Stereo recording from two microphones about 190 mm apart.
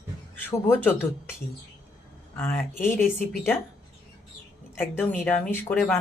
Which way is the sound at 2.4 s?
10° left (ahead or behind).